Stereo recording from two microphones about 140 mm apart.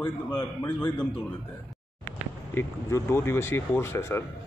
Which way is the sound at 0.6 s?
10° left (ahead or behind).